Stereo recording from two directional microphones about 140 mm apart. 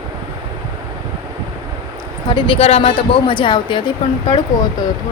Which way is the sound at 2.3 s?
35° left (ahead or behind).